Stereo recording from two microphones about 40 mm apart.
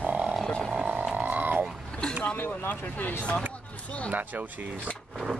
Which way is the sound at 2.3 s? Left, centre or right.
Left.